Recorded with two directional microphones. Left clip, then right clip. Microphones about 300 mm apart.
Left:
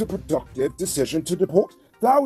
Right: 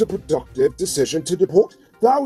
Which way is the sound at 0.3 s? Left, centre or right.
Left.